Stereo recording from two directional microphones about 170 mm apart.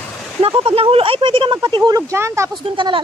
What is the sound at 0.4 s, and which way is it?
Speech, 35° right (ahead or behind).